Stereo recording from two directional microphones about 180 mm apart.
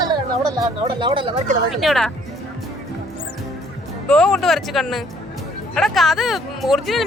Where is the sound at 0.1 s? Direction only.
25° right (ahead or behind).